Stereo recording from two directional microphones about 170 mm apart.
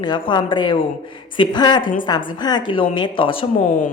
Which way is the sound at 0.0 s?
25° left (ahead or behind).